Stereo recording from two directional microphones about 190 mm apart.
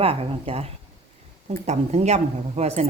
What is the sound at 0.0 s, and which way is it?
Speech, 30° right (ahead or behind).